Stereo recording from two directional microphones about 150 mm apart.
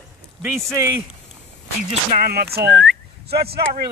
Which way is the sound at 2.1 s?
90° right.